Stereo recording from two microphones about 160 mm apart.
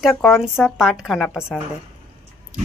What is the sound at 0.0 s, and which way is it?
Speech, centre (ahead or behind).